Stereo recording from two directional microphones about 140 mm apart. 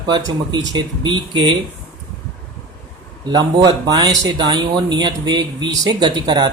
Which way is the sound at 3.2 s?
30° right (ahead or behind).